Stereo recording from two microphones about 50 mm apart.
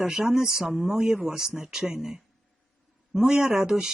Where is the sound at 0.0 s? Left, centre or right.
Centre.